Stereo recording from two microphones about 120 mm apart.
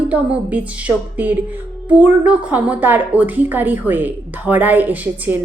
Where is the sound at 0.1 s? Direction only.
10° right (ahead or behind).